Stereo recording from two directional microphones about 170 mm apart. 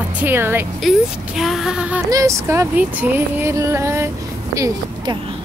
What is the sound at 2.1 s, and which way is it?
Speech, 20° right (ahead or behind).